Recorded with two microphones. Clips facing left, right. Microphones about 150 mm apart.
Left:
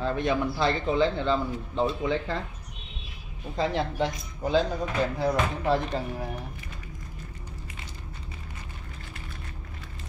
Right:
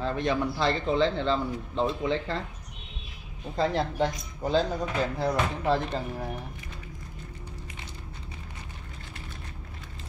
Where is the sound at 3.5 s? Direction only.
Centre (ahead or behind).